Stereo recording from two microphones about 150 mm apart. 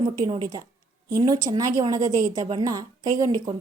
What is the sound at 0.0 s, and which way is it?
A woman's voice, 30° right (ahead or behind).